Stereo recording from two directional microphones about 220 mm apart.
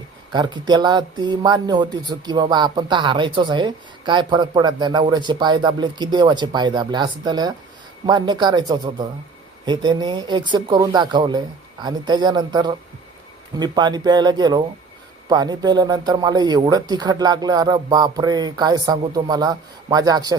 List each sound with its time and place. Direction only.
0.3 s a man's voice: 20° right (ahead or behind)